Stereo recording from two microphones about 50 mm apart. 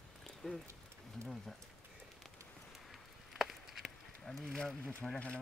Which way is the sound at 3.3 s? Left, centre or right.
Centre.